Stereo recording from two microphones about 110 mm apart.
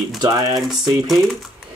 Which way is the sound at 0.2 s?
40° right (ahead or behind).